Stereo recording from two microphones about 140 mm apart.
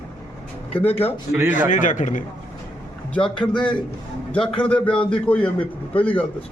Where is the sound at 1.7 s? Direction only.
65° left (ahead or behind).